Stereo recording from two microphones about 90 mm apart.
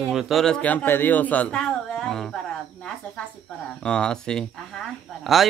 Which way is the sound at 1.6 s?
5° left (ahead or behind).